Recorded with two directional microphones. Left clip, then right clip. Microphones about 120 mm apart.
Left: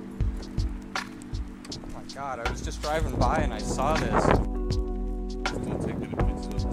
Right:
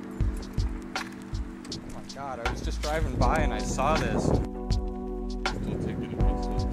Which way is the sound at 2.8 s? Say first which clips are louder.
Left 2 dB; 15° left (ahead or behind).